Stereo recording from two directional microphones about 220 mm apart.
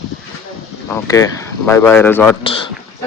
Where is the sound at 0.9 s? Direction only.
15° left (ahead or behind).